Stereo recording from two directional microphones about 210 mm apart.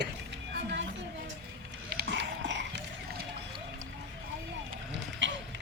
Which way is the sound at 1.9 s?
50° right (ahead or behind).